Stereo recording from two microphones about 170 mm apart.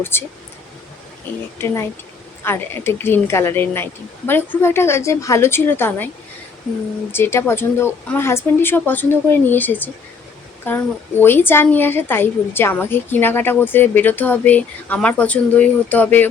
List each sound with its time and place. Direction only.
0.0 s a woman's voice: 15° left (ahead or behind)
1.5 s a woman's voice: 15° left (ahead or behind)
7.1 s a woman's voice: 15° left (ahead or behind)